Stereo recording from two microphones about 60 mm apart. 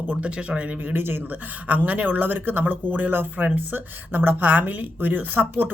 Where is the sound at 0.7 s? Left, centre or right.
Right.